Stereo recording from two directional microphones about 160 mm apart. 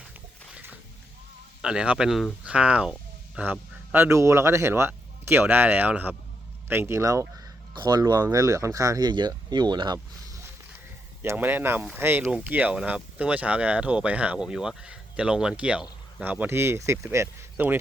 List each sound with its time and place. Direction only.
0.5 s a sound: 10° right (ahead or behind)
1.6 s speech: 5° right (ahead or behind); by 10.4 s 25° right (ahead or behind)
11.2 s speech: 10° right (ahead or behind)